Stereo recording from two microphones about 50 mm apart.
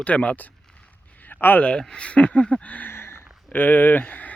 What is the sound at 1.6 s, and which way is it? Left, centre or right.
Speech, centre.